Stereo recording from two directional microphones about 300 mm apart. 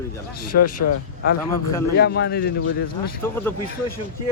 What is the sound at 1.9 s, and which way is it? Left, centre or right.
Speech, left.